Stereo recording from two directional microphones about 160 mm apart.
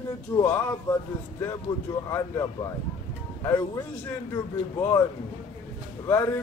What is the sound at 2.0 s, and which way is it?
Speech, 20° left (ahead or behind).